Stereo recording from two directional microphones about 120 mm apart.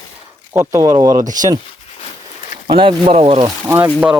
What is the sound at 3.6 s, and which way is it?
Speech, 20° right (ahead or behind).